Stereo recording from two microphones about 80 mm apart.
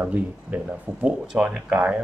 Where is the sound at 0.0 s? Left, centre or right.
Centre.